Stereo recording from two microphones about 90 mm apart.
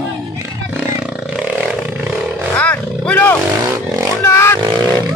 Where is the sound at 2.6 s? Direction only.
15° left (ahead or behind).